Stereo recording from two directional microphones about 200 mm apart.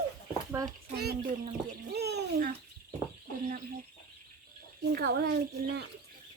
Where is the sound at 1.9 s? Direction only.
55° right (ahead or behind).